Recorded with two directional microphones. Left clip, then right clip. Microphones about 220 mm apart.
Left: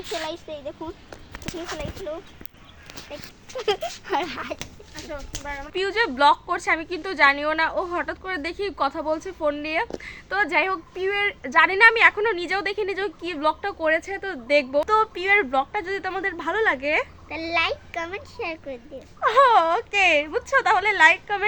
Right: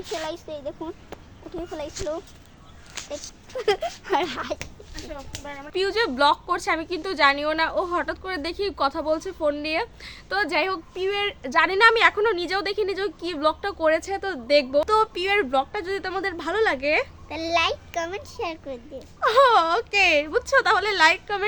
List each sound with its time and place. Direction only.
0.3 s speech: 5° left (ahead or behind)
3.7 s a woman's voice: 5° right (ahead or behind)
5.7 s a woman's voice: 10° right (ahead or behind)
17.2 s a woman's voice: 15° right (ahead or behind)
19.2 s speech: 5° right (ahead or behind)